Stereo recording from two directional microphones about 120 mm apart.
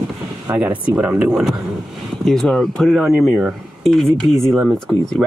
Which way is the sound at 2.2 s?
5° left (ahead or behind).